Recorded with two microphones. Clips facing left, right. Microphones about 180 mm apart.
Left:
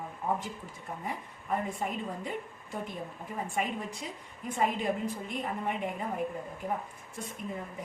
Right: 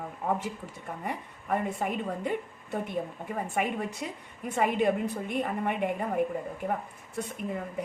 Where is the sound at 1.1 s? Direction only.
65° right (ahead or behind).